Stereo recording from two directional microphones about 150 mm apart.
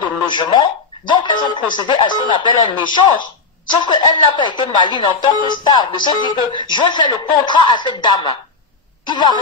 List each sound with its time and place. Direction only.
0.0 s speech: 30° left (ahead or behind)